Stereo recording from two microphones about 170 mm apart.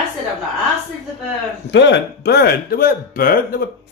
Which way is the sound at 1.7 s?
90° left.